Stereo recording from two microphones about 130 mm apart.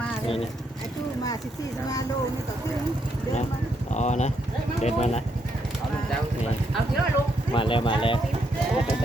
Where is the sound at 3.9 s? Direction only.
60° left (ahead or behind).